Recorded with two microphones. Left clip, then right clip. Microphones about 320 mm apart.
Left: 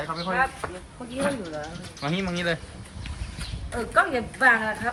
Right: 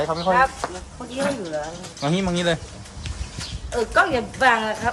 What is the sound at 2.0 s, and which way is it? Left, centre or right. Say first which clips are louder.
Speech: right 5 dB; centre.